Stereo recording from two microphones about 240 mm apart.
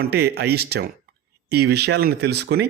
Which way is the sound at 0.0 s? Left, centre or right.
Right.